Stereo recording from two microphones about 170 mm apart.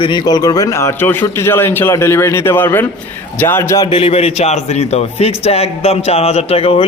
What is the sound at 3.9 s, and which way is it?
A man's voice, 35° left (ahead or behind).